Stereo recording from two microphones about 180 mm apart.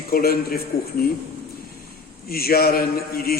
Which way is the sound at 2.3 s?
55° left (ahead or behind).